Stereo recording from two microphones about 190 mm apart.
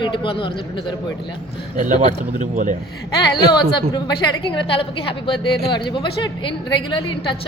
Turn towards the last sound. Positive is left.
turn(degrees=25)  # may be behind; listen again after turning